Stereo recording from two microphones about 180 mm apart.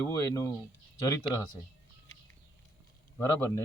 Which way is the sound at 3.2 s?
15° left (ahead or behind).